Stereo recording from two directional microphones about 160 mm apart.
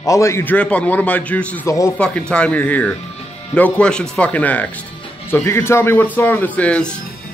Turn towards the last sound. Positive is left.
turn(degrees=5)  # may be behind; listen again after turning